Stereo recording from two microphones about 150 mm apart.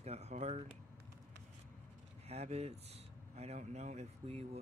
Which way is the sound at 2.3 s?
45° right (ahead or behind).